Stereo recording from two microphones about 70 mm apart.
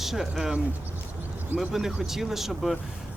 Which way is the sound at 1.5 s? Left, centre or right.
Centre.